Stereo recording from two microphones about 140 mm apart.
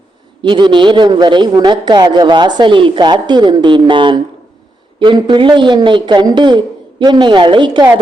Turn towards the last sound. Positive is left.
turn(degrees=-35)  # may be behind; listen again after turning